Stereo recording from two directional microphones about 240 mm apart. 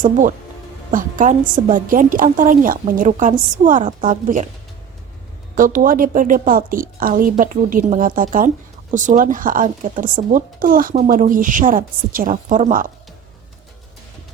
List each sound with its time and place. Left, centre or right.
0.0 s speech: right
5.5 s speech: right